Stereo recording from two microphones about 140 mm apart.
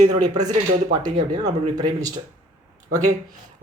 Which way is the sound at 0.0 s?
60° right (ahead or behind).